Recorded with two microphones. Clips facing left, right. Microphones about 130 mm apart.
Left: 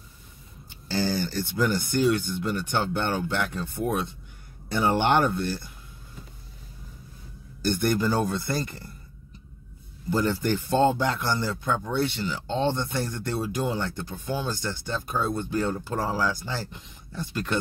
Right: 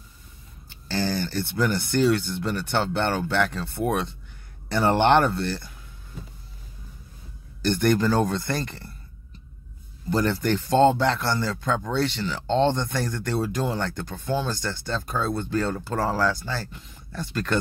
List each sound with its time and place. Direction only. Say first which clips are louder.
0.7 s a sound: even; 15° left (ahead or behind)
1.3 s speech: right 1 dB; 60° right (ahead or behind)
1.9 s speech: right 2 dB; 15° left (ahead or behind)
3.6 s speech: right 2 dB; 70° right (ahead or behind)
5.2 s speech: right 1 dB; 15° left (ahead or behind)
7.7 s speech: right 3 dB; 10° left (ahead or behind)
10.0 s speech: right 1 dB; 10° left (ahead or behind)